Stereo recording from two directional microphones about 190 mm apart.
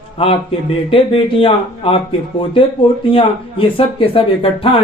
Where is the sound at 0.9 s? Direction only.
30° left (ahead or behind).